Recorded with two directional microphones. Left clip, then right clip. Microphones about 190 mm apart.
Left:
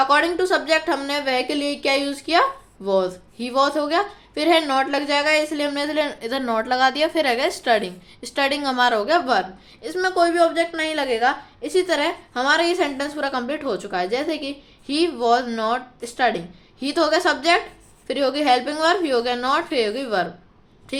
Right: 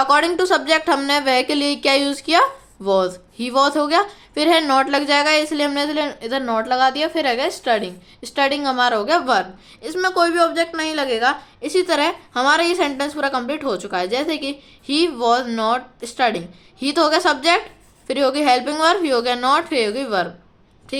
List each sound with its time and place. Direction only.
0.0 s a woman's voice: 25° right (ahead or behind); by 21.1 s 10° right (ahead or behind)